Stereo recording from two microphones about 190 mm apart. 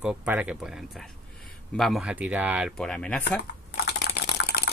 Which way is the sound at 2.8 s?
5° left (ahead or behind).